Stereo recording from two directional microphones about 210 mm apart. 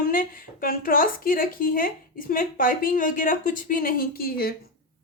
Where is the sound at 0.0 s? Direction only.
40° left (ahead or behind).